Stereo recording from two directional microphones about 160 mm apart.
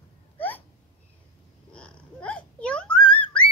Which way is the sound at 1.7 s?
5° left (ahead or behind).